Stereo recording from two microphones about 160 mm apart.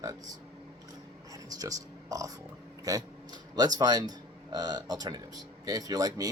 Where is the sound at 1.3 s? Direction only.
20° right (ahead or behind).